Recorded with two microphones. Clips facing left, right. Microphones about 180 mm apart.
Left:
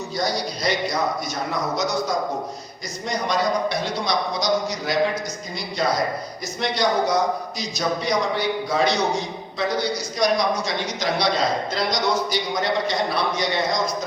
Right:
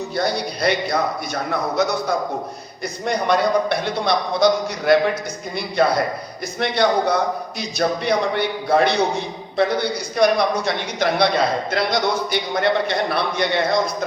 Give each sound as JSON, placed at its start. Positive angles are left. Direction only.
{"t": 0.2, "sound": "a man's voice", "side_deg": -60}